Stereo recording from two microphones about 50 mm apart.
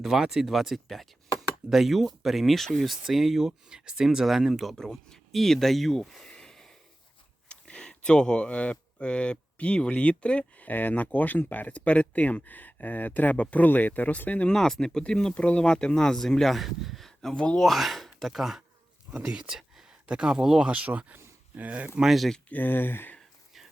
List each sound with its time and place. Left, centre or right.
0.0 s speech: centre
6.2 s a sound: centre
7.4 s speech: left
10.7 s speech: left
14.5 s speech: centre
17.1 s a sound: centre
17.6 s speech: centre
19.2 s a sound: centre
20.1 s speech: centre
20.7 s speech: right
21.8 s speech: centre
22.4 s speech: left